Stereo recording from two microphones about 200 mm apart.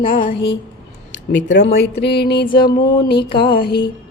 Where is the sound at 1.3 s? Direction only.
65° left (ahead or behind).